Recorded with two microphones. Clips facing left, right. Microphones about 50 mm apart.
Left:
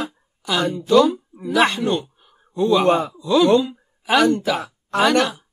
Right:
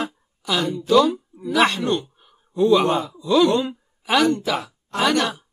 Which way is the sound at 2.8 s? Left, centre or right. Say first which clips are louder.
Left 4 dB; left.